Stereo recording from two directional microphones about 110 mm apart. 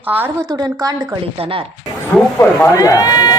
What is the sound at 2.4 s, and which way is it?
Speech, 25° left (ahead or behind).